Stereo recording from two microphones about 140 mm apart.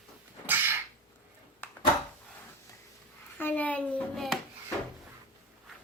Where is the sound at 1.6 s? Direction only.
15° left (ahead or behind).